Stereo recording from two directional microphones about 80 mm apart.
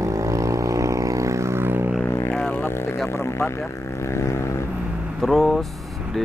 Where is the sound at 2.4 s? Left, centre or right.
Centre.